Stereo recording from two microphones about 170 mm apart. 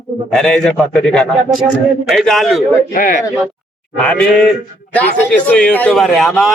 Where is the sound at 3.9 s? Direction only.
5° left (ahead or behind).